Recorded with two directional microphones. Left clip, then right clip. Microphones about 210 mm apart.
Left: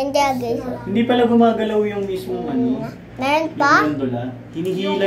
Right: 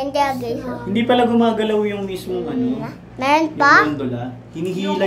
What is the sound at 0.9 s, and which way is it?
A child's voice, 25° right (ahead or behind).